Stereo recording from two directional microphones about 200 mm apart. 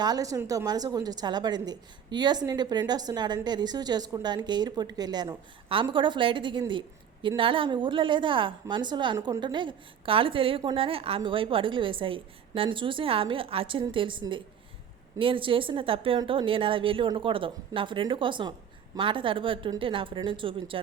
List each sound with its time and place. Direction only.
0.0 s a woman's voice: 20° right (ahead or behind)